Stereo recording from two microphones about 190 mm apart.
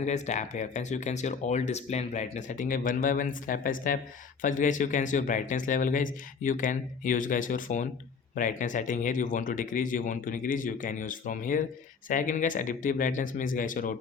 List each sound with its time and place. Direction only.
0.0 s speech: 35° left (ahead or behind)